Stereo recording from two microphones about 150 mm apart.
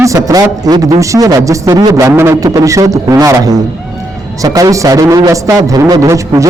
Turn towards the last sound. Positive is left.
turn(degrees=-20)  # may be behind; listen again after turning